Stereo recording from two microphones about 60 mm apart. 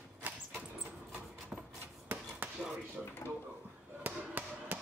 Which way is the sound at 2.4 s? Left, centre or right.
Right.